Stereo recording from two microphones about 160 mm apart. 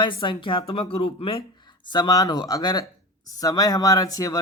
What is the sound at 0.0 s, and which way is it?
Speech, 30° left (ahead or behind).